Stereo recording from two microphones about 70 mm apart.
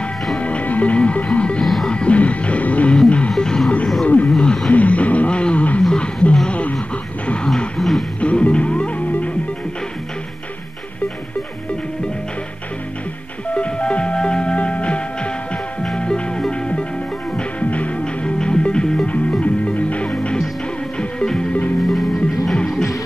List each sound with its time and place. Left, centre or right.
0.4 s music: centre
4.0 s wild animals: left
4.3 s music: centre
7.4 s a sound: centre
8.2 s music: centre
13.6 s music: centre